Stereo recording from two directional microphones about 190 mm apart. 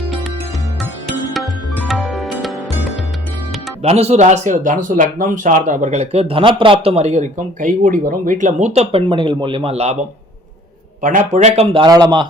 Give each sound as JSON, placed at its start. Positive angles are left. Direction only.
{"t": 1.3, "sound": "music", "side_deg": 0}
{"t": 3.8, "sound": "speech", "side_deg": -35}
{"t": 11.0, "sound": "a man's voice", "side_deg": -45}
{"t": 11.5, "sound": "a man's voice", "side_deg": -25}